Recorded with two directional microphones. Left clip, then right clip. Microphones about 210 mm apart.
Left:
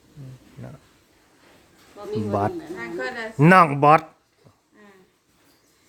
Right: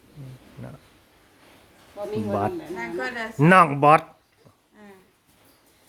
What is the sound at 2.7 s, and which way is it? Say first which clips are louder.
Speech: even; 40° right (ahead or behind).